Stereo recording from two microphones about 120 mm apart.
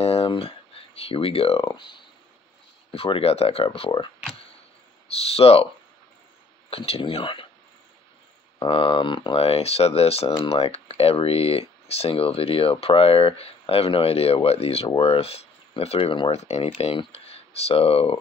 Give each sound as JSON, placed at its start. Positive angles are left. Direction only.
{"t": 0.0, "sound": "a sound", "side_deg": 55}
{"t": 2.9, "sound": "speech", "side_deg": 55}
{"t": 5.1, "sound": "speech", "side_deg": 55}
{"t": 6.7, "sound": "speech", "side_deg": 50}
{"t": 8.5, "sound": "speech", "side_deg": 45}
{"t": 16.3, "sound": "speech", "side_deg": 65}